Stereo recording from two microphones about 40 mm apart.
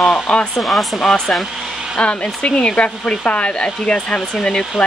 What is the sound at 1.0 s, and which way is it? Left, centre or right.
Speech, centre.